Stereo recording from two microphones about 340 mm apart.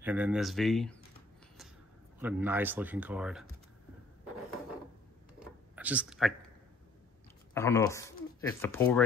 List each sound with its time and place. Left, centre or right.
0.0 s speech: centre
2.1 s speech: centre
5.8 s speech: centre
7.5 s speech: centre